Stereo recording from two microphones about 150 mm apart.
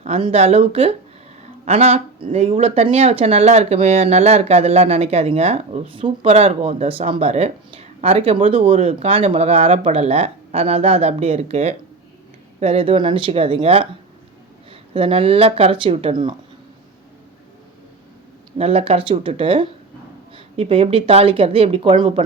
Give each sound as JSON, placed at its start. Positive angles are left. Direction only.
{"t": 0.2, "sound": "speech", "side_deg": -45}
{"t": 18.5, "sound": "speech", "side_deg": -45}